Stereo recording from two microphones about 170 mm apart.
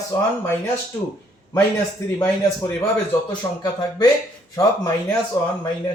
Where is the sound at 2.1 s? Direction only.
10° left (ahead or behind).